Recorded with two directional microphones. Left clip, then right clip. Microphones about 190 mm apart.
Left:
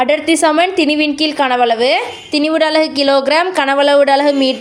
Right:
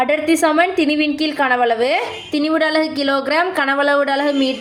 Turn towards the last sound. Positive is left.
turn(degrees=35)  # may be behind; listen again after turning